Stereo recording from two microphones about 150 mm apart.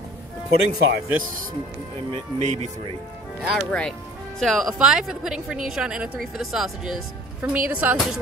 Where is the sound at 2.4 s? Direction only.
55° right (ahead or behind).